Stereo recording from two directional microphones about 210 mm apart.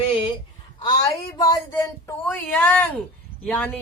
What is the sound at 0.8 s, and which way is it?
A woman's voice, 20° left (ahead or behind).